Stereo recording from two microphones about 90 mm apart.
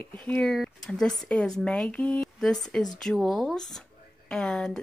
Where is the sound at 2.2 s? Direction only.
5° left (ahead or behind).